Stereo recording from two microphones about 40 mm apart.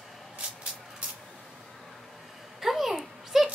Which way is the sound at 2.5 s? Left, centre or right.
Centre.